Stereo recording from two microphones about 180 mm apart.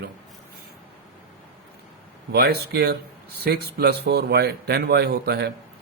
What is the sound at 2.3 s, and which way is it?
A man's voice, 65° right (ahead or behind).